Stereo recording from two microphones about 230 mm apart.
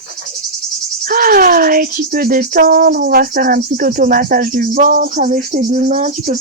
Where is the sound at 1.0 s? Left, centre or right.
Right.